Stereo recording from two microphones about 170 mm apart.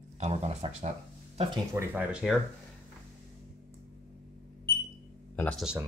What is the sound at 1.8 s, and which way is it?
Speech, 15° right (ahead or behind).